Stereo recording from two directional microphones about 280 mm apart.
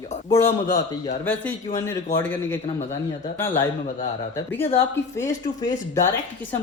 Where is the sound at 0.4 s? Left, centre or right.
Left.